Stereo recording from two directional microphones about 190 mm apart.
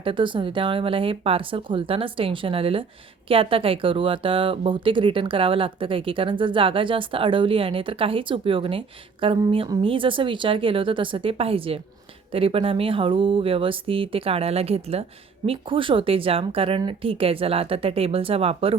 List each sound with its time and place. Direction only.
0.0 s speech: 25° right (ahead or behind)